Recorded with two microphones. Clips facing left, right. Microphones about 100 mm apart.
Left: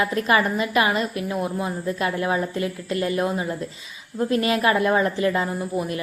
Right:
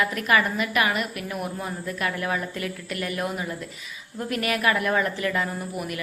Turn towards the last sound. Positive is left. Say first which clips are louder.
# left 5 dB
turn(degrees=30)  # may be behind; listen again after turning